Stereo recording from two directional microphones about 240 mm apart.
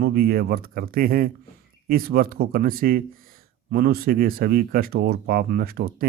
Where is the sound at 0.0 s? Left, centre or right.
Right.